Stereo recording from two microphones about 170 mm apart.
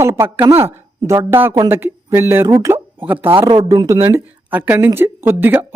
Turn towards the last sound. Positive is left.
turn(degrees=-10)  # may be behind; listen again after turning